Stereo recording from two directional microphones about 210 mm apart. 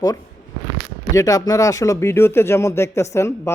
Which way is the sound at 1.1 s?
15° left (ahead or behind).